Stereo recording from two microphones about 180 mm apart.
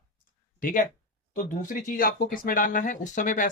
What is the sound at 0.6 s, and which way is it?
Speech, 45° left (ahead or behind).